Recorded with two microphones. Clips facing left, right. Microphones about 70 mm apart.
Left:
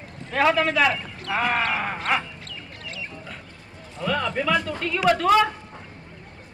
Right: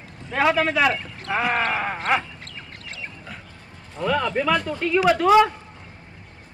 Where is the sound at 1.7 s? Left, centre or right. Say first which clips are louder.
Right 1 dB; centre.